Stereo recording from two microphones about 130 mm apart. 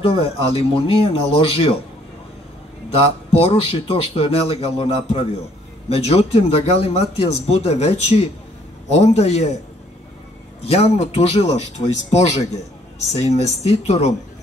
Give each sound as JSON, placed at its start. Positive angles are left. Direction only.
{"t": 0.0, "sound": "speech", "side_deg": 50}
{"t": 2.9, "sound": "speech", "side_deg": 50}
{"t": 10.6, "sound": "speech", "side_deg": 50}